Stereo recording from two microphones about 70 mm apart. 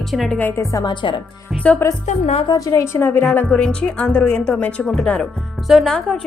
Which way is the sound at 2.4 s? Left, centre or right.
Left.